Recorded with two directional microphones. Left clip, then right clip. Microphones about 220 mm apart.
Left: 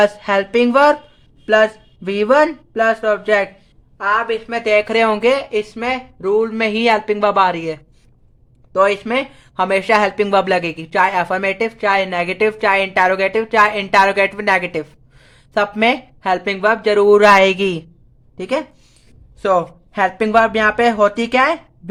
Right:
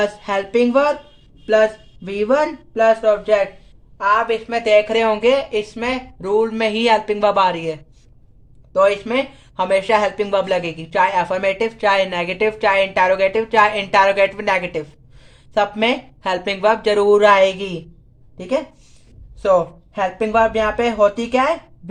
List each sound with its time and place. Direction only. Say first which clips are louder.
0.0 s a woman's voice: left 5 dB; 30° left (ahead or behind)